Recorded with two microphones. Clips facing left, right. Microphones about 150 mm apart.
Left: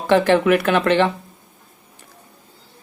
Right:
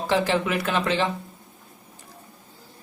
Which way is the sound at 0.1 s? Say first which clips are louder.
Left 9 dB; 60° left (ahead or behind).